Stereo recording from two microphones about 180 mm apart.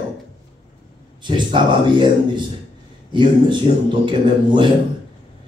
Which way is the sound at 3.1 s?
25° right (ahead or behind).